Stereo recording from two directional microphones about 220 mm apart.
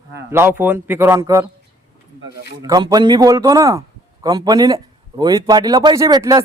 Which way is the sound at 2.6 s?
15° right (ahead or behind).